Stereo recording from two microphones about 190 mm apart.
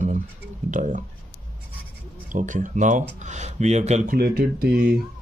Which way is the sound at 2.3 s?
40° right (ahead or behind).